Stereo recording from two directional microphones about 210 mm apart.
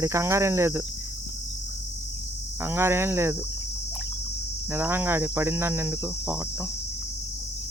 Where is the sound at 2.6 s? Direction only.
10° right (ahead or behind).